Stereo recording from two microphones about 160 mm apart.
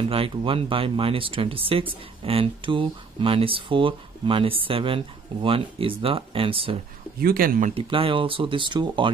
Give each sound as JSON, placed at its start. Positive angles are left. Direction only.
{"t": 0.1, "sound": "speech", "side_deg": -35}
{"t": 7.2, "sound": "speech", "side_deg": -65}
{"t": 7.7, "sound": "speech", "side_deg": -35}